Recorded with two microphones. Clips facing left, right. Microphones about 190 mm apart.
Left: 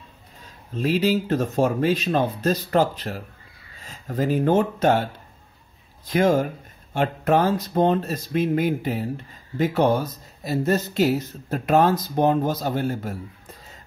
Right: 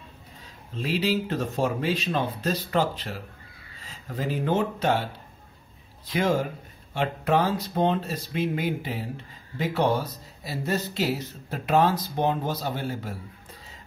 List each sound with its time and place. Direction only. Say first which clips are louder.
0.7 s speech: left 5 dB; 45° left (ahead or behind)
6.0 s speech: left 5 dB; 45° left (ahead or behind)